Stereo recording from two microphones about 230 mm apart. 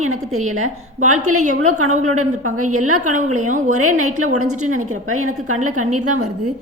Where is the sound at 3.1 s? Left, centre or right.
Right.